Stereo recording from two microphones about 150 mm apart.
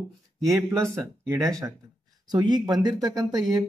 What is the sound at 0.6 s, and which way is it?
Speech, 15° right (ahead or behind).